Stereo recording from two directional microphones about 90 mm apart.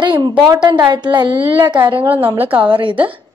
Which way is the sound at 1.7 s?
65° right (ahead or behind).